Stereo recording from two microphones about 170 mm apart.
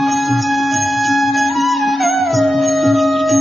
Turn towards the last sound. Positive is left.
turn(degrees=0)  # may be behind; listen again after turning